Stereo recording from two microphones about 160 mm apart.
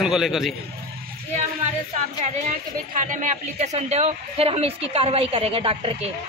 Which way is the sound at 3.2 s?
45° right (ahead or behind).